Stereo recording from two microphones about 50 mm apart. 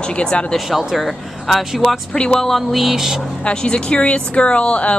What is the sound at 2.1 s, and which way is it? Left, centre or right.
Speech, centre.